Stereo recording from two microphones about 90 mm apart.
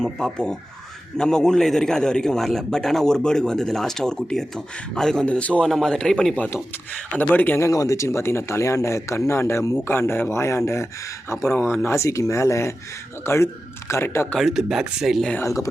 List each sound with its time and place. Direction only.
0.0 s a man's voice: 5° left (ahead or behind)
7.2 s a man's voice: 20° left (ahead or behind)
7.7 s speech: 40° left (ahead or behind)
11.5 s a man's voice: 25° left (ahead or behind)
14.3 s speech: 5° right (ahead or behind)
15.4 s speech: 35° left (ahead or behind)